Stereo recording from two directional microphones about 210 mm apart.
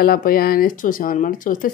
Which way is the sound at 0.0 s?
45° left (ahead or behind).